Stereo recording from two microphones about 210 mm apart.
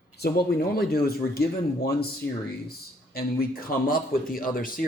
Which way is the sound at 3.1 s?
45° left (ahead or behind).